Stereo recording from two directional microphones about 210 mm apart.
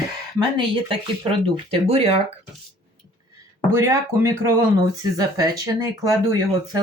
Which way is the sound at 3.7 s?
15° right (ahead or behind).